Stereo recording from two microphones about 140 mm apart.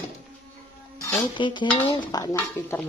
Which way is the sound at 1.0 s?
20° left (ahead or behind).